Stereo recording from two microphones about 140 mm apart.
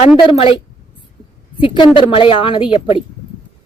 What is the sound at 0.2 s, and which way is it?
Speech, 40° left (ahead or behind).